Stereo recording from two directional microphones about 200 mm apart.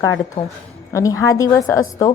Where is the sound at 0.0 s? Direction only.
15° left (ahead or behind).